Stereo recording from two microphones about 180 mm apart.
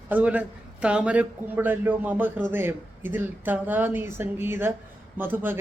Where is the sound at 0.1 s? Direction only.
10° right (ahead or behind).